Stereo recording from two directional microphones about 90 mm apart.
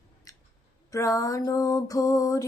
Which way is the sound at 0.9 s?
40° left (ahead or behind).